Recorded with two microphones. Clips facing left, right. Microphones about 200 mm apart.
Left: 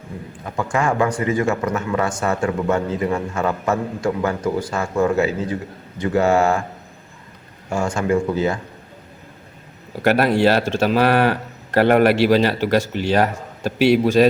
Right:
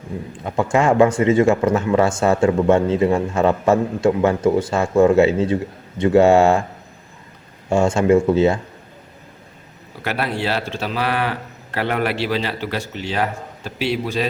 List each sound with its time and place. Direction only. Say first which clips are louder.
0.4 s speech: right 4 dB; 25° right (ahead or behind)
7.7 s speech: right 5 dB; 25° right (ahead or behind)
10.0 s a man's voice: left 8 dB; 45° left (ahead or behind)